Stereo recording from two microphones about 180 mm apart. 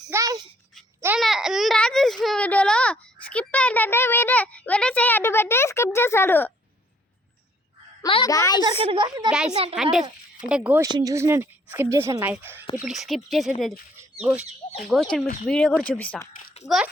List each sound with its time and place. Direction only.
0.1 s a sound: 20° right (ahead or behind)
1.2 s speech: centre (ahead or behind)
8.0 s a child's voice: 25° left (ahead or behind)
8.6 s a woman's voice: 30° right (ahead or behind)
9.7 s a woman's voice: centre (ahead or behind)
14.8 s speech: centre (ahead or behind)
16.6 s speech: centre (ahead or behind)